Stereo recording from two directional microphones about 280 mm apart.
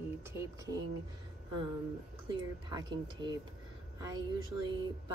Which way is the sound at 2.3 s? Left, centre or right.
Centre.